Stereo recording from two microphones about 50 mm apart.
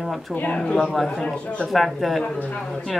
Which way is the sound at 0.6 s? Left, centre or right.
Left.